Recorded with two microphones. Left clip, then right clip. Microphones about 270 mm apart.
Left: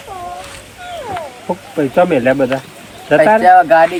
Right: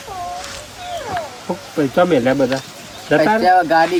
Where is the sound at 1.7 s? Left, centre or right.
Centre.